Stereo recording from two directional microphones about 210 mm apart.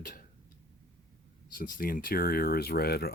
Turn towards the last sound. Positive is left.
turn(degrees=50)  # may be behind; listen again after turning